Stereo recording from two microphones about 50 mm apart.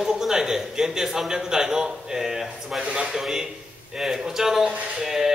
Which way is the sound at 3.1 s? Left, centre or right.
Centre.